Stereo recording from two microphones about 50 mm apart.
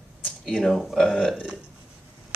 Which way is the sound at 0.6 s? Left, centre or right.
Centre.